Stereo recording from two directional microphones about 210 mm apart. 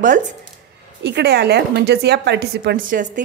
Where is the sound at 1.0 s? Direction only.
50° right (ahead or behind).